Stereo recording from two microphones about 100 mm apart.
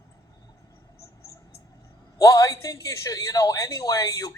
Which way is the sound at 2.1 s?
35° left (ahead or behind).